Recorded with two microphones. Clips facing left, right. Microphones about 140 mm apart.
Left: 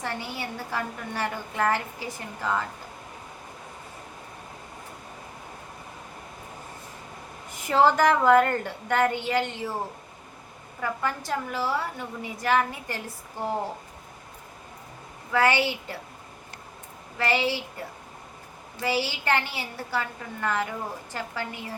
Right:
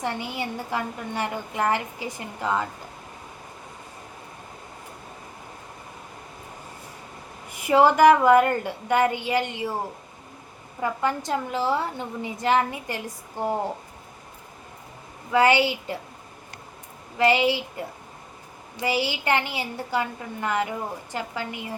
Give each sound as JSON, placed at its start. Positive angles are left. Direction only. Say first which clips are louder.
{"t": 0.0, "sound": "a woman's voice", "louder": "right 4 dB", "side_deg": -15}
{"t": 7.5, "sound": "a woman's voice", "louder": "right 3 dB", "side_deg": -15}
{"t": 10.8, "sound": "a woman's voice", "louder": "right 4 dB", "side_deg": -20}
{"t": 15.3, "sound": "a woman's voice", "louder": "right 4 dB", "side_deg": -15}
{"t": 17.2, "sound": "a woman's voice", "louder": "right 5 dB", "side_deg": -15}